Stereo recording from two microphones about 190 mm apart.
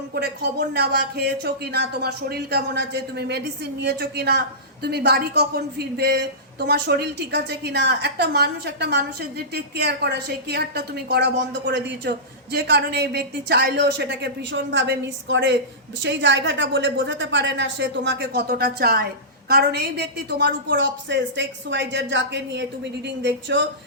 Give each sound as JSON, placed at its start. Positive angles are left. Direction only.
{"t": 0.1, "sound": "a woman's voice", "side_deg": -60}